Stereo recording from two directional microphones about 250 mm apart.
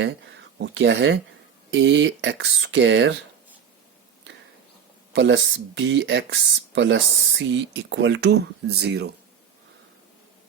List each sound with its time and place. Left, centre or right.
0.6 s speech: right
5.1 s speech: right